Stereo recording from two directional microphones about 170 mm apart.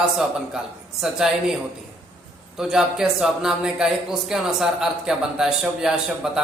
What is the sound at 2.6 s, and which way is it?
Speech, 5° right (ahead or behind).